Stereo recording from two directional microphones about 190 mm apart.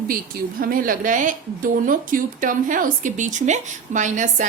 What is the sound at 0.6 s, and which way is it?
Speech, 50° right (ahead or behind).